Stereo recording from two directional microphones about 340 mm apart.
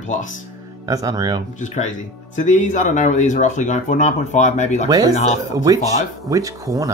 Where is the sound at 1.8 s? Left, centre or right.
Left.